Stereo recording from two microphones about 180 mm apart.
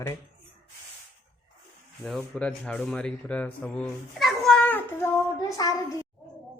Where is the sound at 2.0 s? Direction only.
5° left (ahead or behind); by 5.8 s 20° left (ahead or behind).